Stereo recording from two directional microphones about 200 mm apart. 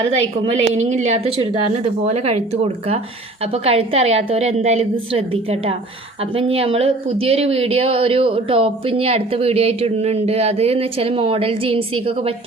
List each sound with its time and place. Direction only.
0.0 s a woman's voice: 30° right (ahead or behind)
3.5 s speech: 30° right (ahead or behind)